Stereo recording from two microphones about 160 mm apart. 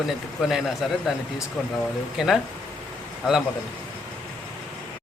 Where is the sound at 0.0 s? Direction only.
Centre (ahead or behind).